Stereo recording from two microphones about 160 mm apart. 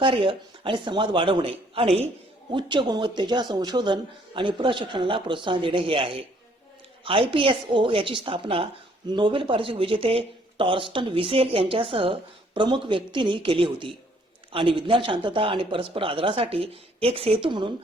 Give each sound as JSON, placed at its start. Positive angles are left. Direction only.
{"t": 0.0, "sound": "speech", "side_deg": -30}